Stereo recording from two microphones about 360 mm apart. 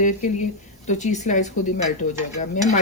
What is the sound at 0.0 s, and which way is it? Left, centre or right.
Speech, centre.